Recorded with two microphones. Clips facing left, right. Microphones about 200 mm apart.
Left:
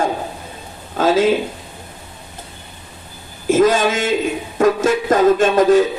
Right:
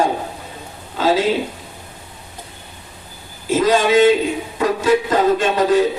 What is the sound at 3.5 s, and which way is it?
A man's voice, 45° left (ahead or behind).